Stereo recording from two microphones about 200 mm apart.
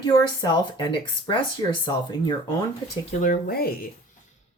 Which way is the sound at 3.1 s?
40° left (ahead or behind).